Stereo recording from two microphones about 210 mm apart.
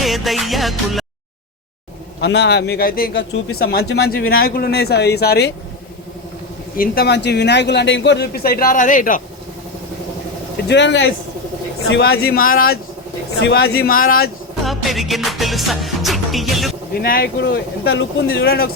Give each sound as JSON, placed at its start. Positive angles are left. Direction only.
{"t": 0.0, "sound": "music", "side_deg": 0}
{"t": 2.2, "sound": "a man's voice", "side_deg": 55}
{"t": 6.7, "sound": "a man's voice", "side_deg": 50}
{"t": 10.7, "sound": "a man's voice", "side_deg": 60}
{"t": 14.6, "sound": "music", "side_deg": 0}
{"t": 16.9, "sound": "a man's voice", "side_deg": 45}